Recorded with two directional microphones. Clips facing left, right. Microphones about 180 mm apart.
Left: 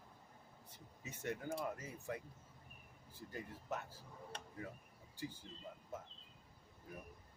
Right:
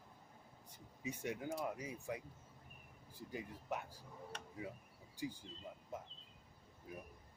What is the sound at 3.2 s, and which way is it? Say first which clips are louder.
Speech: right 1 dB; 10° right (ahead or behind).